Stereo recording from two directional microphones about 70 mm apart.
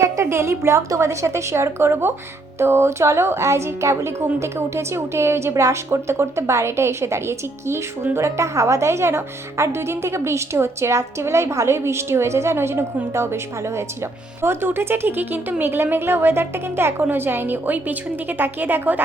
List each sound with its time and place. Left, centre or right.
0.0 s a woman's voice: right